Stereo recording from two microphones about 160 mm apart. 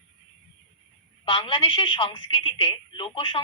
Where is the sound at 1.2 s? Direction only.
30° left (ahead or behind).